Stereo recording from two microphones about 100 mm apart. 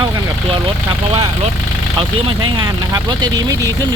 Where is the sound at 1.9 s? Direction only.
50° right (ahead or behind).